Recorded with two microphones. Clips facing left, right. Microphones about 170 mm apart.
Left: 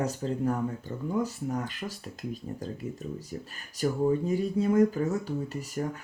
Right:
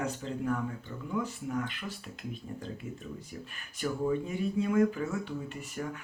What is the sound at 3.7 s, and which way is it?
Speech, 40° left (ahead or behind).